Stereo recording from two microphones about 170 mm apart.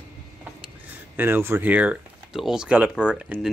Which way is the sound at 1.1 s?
10° right (ahead or behind).